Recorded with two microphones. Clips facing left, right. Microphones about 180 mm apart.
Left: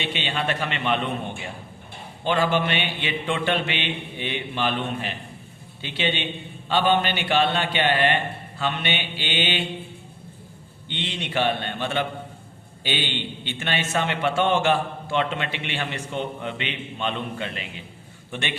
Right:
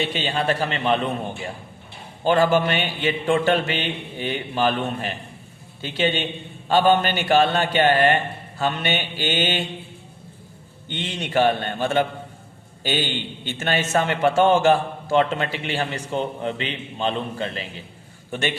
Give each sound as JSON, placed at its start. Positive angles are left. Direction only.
{"t": 0.0, "sound": "a man's voice", "side_deg": -40}
{"t": 2.2, "sound": "a man's voice", "side_deg": -45}
{"t": 10.8, "sound": "a man's voice", "side_deg": -45}